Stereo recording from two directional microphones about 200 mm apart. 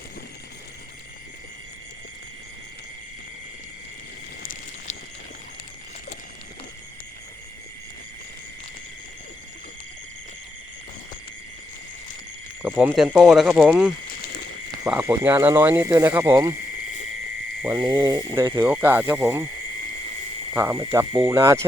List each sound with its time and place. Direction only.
12.6 s speech: 10° right (ahead or behind)
14.1 s a sound: 55° left (ahead or behind)
14.8 s speech: 10° right (ahead or behind)
17.6 s frog: 10° right (ahead or behind)
17.8 s speech: 15° right (ahead or behind)
20.5 s speech: 10° right (ahead or behind)